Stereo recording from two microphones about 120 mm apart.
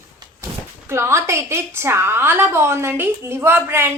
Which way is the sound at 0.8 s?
20° right (ahead or behind).